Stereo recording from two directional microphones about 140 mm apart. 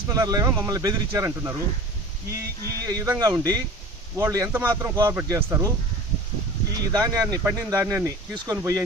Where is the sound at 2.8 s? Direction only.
25° right (ahead or behind).